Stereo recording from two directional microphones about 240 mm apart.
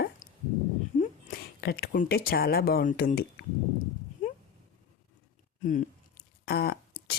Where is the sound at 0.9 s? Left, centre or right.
Left.